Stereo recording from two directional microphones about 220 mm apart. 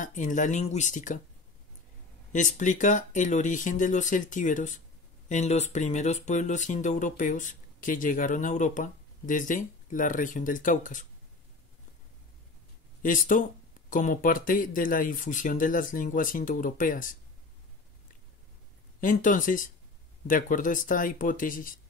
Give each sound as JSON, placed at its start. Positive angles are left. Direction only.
{"t": 0.0, "sound": "speech", "side_deg": 35}
{"t": 2.3, "sound": "speech", "side_deg": 35}
{"t": 13.0, "sound": "speech", "side_deg": 35}
{"t": 18.9, "sound": "speech", "side_deg": 35}